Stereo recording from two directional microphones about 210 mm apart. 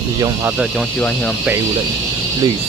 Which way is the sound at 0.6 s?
Centre (ahead or behind).